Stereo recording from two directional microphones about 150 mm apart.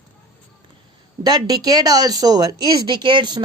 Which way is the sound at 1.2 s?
25° right (ahead or behind).